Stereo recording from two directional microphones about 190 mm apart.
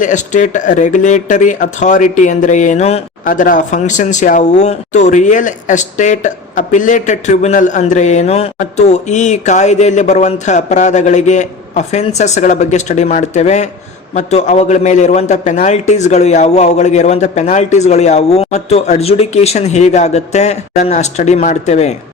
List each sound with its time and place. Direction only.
0.0 s speech: 40° left (ahead or behind)